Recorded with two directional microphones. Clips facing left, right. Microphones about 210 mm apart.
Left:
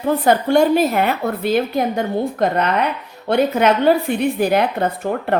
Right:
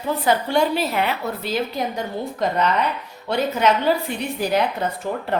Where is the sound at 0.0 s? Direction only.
50° left (ahead or behind).